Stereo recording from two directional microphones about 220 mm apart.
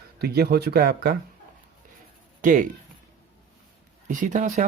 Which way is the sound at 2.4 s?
35° right (ahead or behind).